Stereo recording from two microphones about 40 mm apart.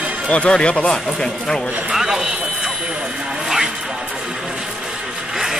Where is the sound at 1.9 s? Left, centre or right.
Centre.